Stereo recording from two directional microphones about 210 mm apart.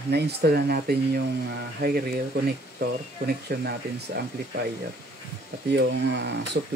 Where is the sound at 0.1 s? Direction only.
50° right (ahead or behind).